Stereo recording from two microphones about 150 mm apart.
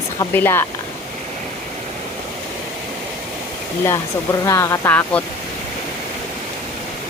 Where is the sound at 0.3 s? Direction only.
15° left (ahead or behind).